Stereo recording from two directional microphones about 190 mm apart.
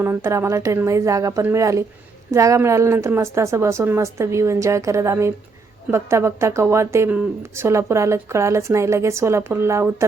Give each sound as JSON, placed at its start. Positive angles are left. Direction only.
{"t": 0.0, "sound": "speech", "side_deg": -10}